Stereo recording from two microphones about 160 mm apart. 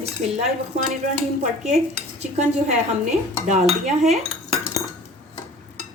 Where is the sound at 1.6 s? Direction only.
45° right (ahead or behind).